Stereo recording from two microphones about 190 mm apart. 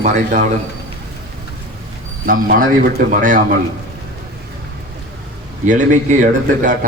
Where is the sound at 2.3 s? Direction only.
45° right (ahead or behind).